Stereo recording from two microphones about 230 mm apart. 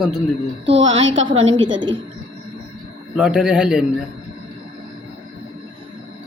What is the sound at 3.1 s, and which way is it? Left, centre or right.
Speech, centre.